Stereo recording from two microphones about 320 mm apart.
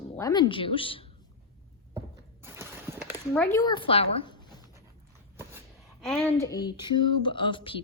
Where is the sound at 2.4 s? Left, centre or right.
Centre.